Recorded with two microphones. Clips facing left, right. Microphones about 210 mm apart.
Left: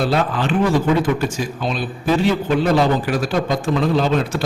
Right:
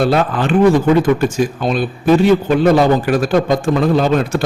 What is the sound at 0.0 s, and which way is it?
A man's voice, 50° right (ahead or behind).